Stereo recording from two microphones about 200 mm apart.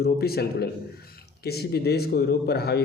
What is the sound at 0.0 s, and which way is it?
A man's voice, 50° left (ahead or behind).